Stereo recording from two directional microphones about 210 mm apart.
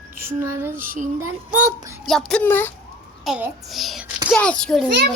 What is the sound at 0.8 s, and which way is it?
Speech, 40° right (ahead or behind).